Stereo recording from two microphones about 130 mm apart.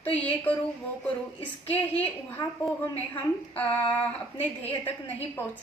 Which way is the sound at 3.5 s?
10° left (ahead or behind).